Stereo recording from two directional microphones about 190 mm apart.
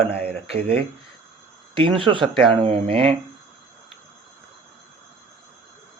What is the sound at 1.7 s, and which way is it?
Speech, 25° right (ahead or behind).